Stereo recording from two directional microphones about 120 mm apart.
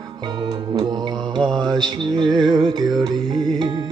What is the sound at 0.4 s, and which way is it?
Music, 35° right (ahead or behind).